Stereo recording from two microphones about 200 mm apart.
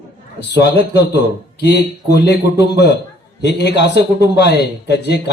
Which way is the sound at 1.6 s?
55° left (ahead or behind).